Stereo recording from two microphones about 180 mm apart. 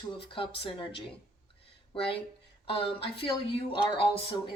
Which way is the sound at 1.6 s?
30° left (ahead or behind).